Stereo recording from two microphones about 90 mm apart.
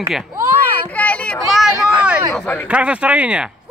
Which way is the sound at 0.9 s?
15° left (ahead or behind).